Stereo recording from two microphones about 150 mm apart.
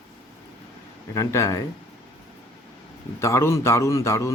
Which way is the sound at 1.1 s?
20° left (ahead or behind).